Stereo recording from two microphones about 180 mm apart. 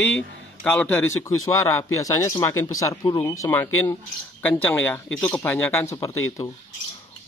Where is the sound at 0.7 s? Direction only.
5° left (ahead or behind).